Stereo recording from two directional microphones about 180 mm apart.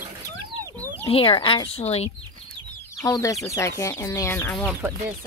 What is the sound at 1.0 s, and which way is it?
Speech, 30° left (ahead or behind).